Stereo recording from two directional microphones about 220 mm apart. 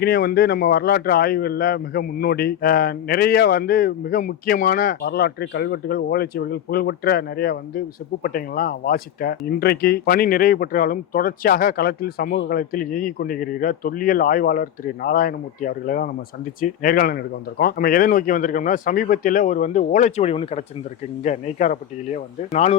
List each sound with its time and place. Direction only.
0.0 s speech: 45° left (ahead or behind)